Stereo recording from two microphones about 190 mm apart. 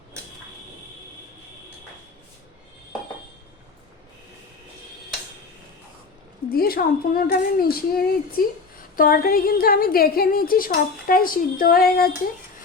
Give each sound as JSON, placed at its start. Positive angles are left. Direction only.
{"t": 6.5, "sound": "a woman's voice", "side_deg": 50}